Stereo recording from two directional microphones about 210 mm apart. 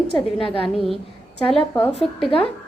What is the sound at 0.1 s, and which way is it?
Speech, 25° left (ahead or behind).